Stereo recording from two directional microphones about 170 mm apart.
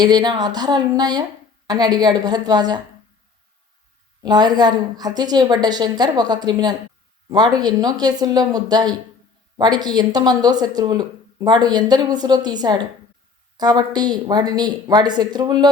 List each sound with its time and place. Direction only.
0.0 s speech: 25° right (ahead or behind)
4.2 s speech: 25° right (ahead or behind)